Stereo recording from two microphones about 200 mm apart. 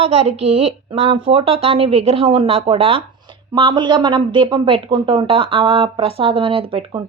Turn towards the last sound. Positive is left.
turn(degrees=-30)  # may be behind; listen again after turning